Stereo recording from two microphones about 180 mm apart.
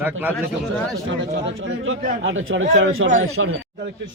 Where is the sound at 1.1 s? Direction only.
90° right.